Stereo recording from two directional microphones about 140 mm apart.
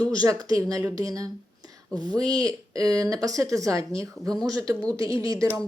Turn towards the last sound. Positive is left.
turn(degrees=-25)  # may be behind; listen again after turning